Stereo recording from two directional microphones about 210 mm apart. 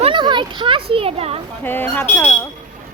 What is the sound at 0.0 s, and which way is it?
Children playing, 20° right (ahead or behind).